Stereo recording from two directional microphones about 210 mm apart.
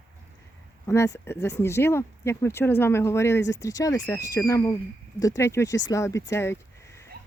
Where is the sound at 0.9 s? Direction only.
15° left (ahead or behind).